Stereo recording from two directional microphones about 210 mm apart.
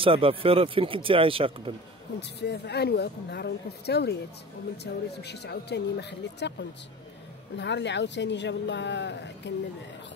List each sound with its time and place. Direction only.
0.0 s speech: 25° right (ahead or behind)
2.1 s speech: 55° left (ahead or behind)
7.5 s a woman's voice: 55° left (ahead or behind)